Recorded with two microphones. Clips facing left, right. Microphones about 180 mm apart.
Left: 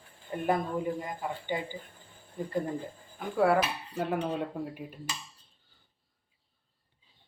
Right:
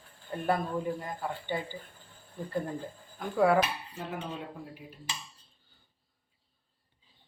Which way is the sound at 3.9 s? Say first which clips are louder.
Left 7 dB; 60° left (ahead or behind).